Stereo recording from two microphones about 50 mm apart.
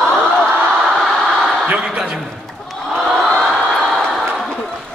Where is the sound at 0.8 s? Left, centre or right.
Centre.